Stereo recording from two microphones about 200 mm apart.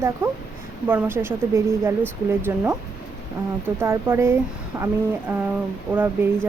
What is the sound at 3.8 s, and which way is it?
A woman's voice, 10° right (ahead or behind).